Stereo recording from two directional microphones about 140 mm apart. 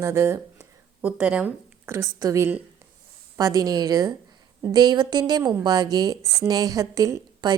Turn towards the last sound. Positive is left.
turn(degrees=-30)  # may be behind; listen again after turning